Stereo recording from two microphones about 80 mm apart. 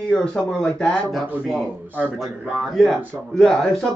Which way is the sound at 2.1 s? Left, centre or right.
Centre.